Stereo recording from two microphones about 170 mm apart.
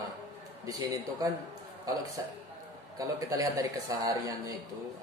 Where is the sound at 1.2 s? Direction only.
20° right (ahead or behind).